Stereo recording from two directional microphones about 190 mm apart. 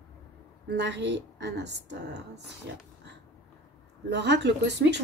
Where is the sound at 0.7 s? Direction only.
65° right (ahead or behind).